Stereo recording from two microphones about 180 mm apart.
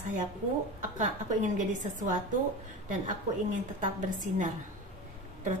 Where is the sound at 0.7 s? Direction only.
45° right (ahead or behind).